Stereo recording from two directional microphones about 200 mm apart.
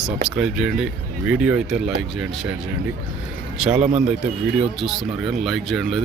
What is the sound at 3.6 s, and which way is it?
Speech, 5° right (ahead or behind).